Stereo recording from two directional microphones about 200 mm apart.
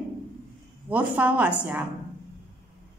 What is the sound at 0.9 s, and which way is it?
Speech, 10° right (ahead or behind).